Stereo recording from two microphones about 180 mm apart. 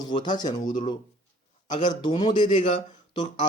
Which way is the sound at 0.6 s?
45° left (ahead or behind).